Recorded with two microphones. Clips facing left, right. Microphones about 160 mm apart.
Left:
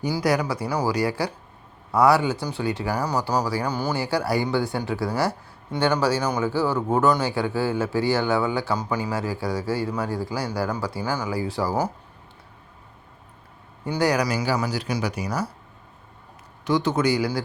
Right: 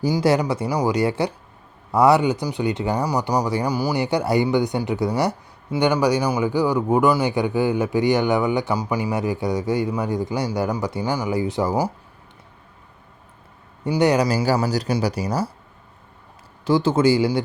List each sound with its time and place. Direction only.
0.1 s a man's voice: 25° right (ahead or behind)
13.8 s speech: 20° right (ahead or behind)
14.3 s a man's voice: 35° right (ahead or behind)
16.6 s speech: 30° right (ahead or behind)